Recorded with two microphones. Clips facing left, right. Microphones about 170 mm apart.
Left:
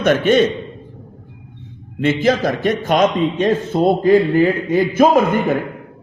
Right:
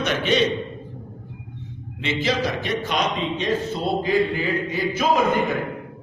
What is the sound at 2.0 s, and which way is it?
A man's voice, 50° left (ahead or behind).